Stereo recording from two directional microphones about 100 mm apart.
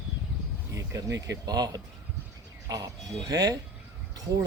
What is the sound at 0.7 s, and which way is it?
Speech, 30° right (ahead or behind).